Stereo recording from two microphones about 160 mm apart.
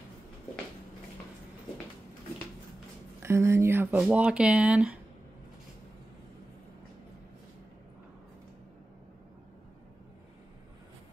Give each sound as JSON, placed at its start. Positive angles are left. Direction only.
{"t": 3.2, "sound": "speech", "side_deg": -15}